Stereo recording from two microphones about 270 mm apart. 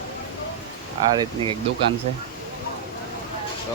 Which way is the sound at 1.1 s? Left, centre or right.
Centre.